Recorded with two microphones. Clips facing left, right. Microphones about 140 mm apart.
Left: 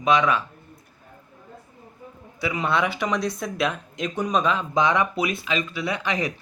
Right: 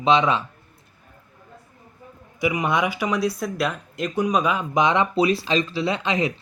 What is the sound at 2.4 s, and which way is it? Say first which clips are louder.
Speech: right 2 dB; 15° right (ahead or behind).